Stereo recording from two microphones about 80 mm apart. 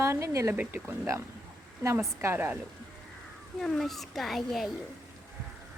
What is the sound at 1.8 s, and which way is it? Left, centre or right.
Speech, right.